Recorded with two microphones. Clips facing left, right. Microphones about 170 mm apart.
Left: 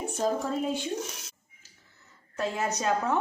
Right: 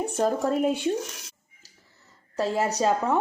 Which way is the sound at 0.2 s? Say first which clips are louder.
Right 5 dB; 65° right (ahead or behind).